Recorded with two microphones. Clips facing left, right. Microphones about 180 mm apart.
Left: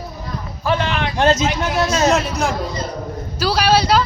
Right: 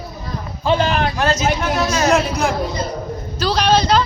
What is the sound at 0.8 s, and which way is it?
Speech, 40° right (ahead or behind).